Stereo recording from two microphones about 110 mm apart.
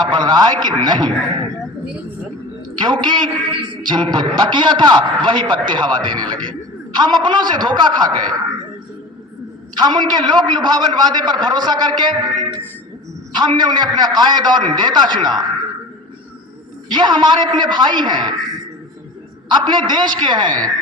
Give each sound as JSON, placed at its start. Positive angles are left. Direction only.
{"t": 0.1, "sound": "a man's voice", "side_deg": -40}
{"t": 2.8, "sound": "a man's voice", "side_deg": -45}
{"t": 9.7, "sound": "a man's voice", "side_deg": -40}
{"t": 16.9, "sound": "a man's voice", "side_deg": -45}
{"t": 19.5, "sound": "a man's voice", "side_deg": -45}